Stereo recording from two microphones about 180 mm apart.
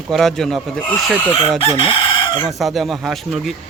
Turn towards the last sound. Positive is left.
turn(degrees=0)  # may be behind; listen again after turning